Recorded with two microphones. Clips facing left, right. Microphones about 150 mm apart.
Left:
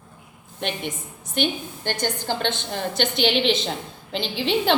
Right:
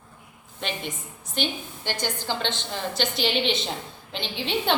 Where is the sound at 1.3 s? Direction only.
55° left (ahead or behind).